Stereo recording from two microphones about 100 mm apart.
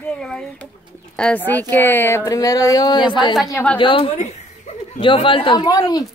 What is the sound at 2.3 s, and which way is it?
A woman's voice, 35° left (ahead or behind).